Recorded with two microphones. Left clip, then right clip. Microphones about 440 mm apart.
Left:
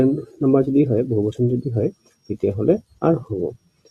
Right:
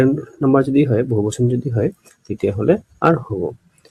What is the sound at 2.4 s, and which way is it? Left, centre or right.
Speech, left.